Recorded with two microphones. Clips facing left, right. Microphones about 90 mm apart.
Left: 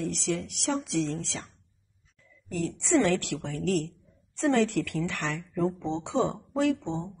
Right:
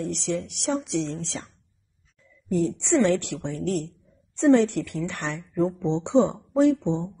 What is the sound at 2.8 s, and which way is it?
A woman's voice, 20° right (ahead or behind).